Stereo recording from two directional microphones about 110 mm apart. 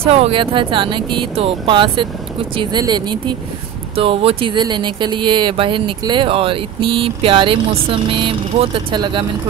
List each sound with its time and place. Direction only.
0.0 s speech: 65° right (ahead or behind)
0.4 s speech: 50° right (ahead or behind)
3.9 s speech: 60° right (ahead or behind)